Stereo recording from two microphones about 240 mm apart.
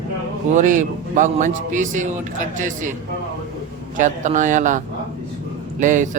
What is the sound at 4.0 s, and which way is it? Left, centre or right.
A man's voice, right.